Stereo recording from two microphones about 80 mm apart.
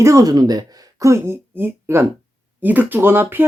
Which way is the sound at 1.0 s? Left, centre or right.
Right.